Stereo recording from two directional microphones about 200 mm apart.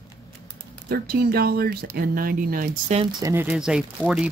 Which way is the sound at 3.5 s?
5° right (ahead or behind).